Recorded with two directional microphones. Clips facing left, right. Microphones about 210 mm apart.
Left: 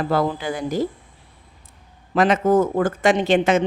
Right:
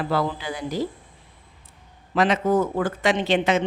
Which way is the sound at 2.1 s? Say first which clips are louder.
Left 3 dB; 50° left (ahead or behind).